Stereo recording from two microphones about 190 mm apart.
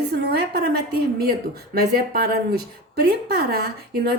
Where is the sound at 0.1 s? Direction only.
60° right (ahead or behind).